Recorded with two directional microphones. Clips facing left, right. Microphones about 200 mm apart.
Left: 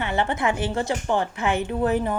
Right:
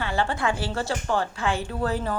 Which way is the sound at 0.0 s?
20° left (ahead or behind).